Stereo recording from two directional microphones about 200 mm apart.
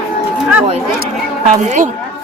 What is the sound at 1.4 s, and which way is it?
Speech, 35° right (ahead or behind).